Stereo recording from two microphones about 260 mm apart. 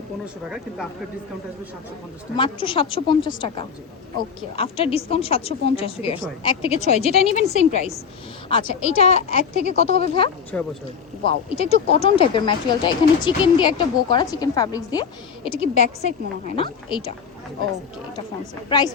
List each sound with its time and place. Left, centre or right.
2.3 s a woman's voice: centre
10.5 s speech: centre
11.5 s a woman's voice: left
18.7 s speech: centre